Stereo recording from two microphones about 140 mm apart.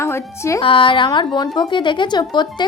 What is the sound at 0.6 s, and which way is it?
A woman's voice, 40° left (ahead or behind).